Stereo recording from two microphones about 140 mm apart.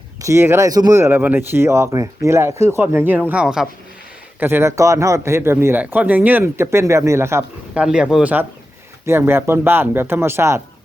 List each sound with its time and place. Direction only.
0.2 s speech: 20° right (ahead or behind); by 3.7 s 5° right (ahead or behind)
4.4 s speech: 15° right (ahead or behind)
7.7 s speech: 5° right (ahead or behind)